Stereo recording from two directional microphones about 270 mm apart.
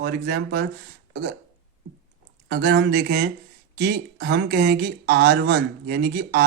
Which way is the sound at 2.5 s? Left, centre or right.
Right.